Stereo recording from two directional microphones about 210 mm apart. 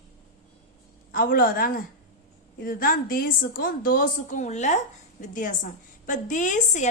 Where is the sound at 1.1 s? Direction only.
45° left (ahead or behind).